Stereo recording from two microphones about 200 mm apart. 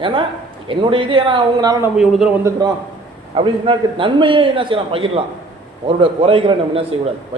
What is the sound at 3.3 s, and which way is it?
A man's voice, 25° right (ahead or behind).